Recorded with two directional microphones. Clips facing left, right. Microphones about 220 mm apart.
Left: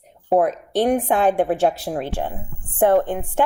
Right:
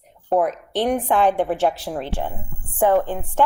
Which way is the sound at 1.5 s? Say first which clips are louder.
Left 2 dB; 40° left (ahead or behind).